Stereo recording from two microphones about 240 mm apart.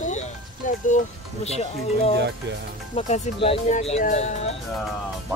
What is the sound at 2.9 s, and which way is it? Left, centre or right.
Speech, left.